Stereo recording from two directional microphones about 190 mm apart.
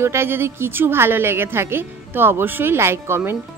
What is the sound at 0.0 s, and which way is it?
A woman's voice, 10° right (ahead or behind).